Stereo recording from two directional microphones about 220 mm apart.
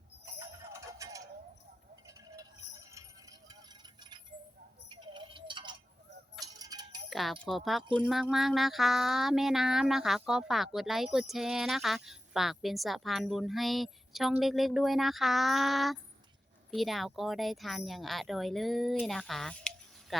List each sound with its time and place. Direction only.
0.3 s music: 15° right (ahead or behind)
2.0 s cowbell: 15° right (ahead or behind)
4.9 s a sound: 20° right (ahead or behind)
6.4 s music: 15° right (ahead or behind)
7.1 s speech: centre (ahead or behind)
7.4 s a sound: centre (ahead or behind)